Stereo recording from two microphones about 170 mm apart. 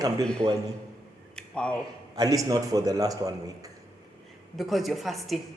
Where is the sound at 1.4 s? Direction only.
5° left (ahead or behind).